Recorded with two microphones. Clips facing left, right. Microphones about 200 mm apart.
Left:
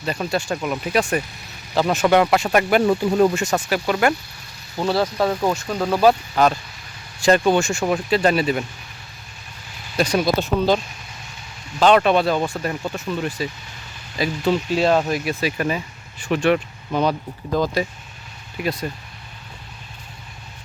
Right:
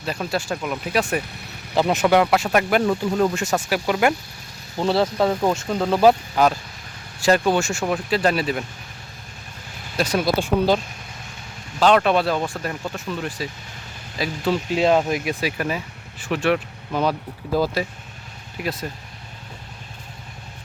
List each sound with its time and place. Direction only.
0.0 s speech: 5° right (ahead or behind)
1.7 s speech: 20° right (ahead or behind)
2.0 s speech: centre (ahead or behind)
4.8 s speech: 25° right (ahead or behind)
6.3 s speech: 10° right (ahead or behind)
10.0 s speech: 5° right (ahead or behind)
11.8 s speech: centre (ahead or behind)
14.7 s speech: 20° right (ahead or behind); by 18.9 s centre (ahead or behind)